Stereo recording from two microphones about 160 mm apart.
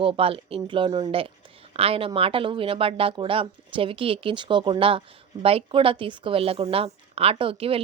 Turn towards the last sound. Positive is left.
turn(degrees=-35)  # may be behind; listen again after turning